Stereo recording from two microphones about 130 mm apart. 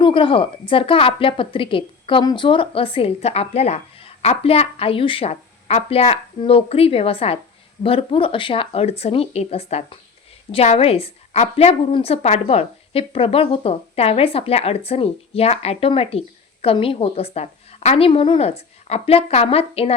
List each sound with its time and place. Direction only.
0.0 s a woman's voice: 40° left (ahead or behind)